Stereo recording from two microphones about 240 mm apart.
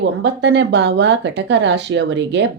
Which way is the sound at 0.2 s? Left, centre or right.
Right.